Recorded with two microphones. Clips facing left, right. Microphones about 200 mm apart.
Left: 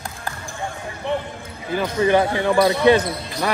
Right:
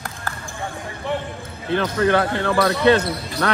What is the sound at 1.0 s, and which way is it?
Speech, 15° left (ahead or behind).